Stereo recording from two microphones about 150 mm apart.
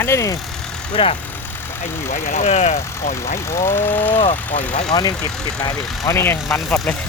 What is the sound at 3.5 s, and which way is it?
Speech, 15° left (ahead or behind).